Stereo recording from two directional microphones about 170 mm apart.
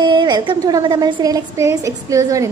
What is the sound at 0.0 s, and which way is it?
A woman's voice, 25° right (ahead or behind).